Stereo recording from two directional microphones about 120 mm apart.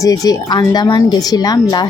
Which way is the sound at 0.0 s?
30° left (ahead or behind).